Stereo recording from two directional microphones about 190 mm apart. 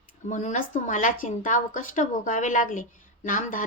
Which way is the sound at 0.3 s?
40° left (ahead or behind).